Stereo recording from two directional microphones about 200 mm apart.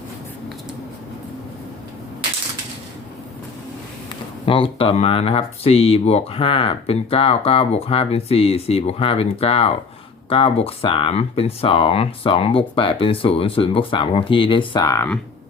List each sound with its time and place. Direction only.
4.4 s speech: 25° left (ahead or behind)